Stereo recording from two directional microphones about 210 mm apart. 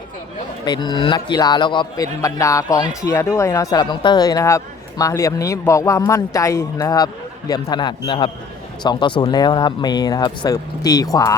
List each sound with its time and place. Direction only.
0.6 s speech: 20° left (ahead or behind)